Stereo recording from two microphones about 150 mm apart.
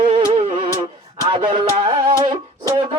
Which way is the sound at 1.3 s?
35° right (ahead or behind).